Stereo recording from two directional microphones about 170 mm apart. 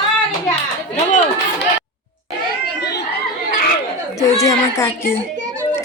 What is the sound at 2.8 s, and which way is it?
Chatter, 70° left (ahead or behind).